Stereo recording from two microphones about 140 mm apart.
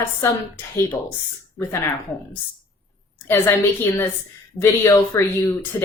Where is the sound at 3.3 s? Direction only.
15° left (ahead or behind).